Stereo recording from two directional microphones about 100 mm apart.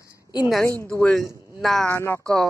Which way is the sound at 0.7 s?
35° right (ahead or behind).